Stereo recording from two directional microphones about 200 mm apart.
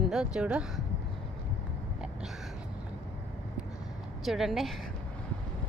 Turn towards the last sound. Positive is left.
turn(degrees=0)  # may be behind; listen again after turning